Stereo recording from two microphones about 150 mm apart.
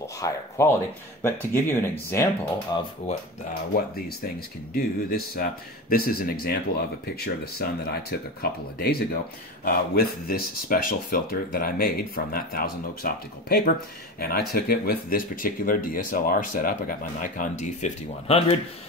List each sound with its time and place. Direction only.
0.0 s speech: 20° left (ahead or behind)
2.7 s speech: 25° left (ahead or behind)
3.7 s speech: 90° left; by 18.6 s 45° left (ahead or behind)